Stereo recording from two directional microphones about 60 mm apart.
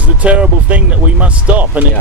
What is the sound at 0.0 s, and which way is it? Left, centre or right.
Speech, right.